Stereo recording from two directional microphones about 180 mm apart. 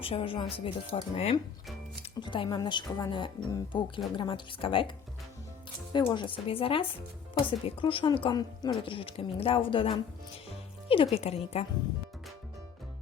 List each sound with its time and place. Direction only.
0.0 s a woman's voice: 30° left (ahead or behind)
5.9 s a woman's voice: 25° left (ahead or behind)